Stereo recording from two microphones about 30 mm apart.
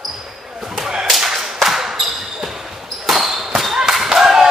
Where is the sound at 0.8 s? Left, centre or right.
Right.